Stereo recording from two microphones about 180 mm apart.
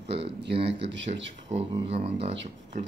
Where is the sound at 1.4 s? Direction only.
30° right (ahead or behind).